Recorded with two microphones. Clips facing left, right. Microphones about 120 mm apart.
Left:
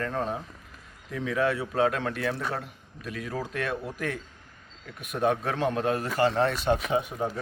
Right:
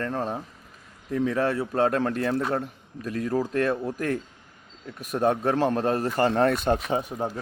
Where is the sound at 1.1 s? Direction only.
40° right (ahead or behind).